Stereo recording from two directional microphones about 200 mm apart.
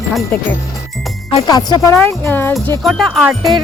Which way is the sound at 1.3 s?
20° left (ahead or behind).